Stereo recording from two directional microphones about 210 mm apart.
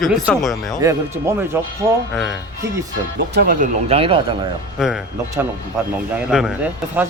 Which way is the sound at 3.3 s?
45° right (ahead or behind).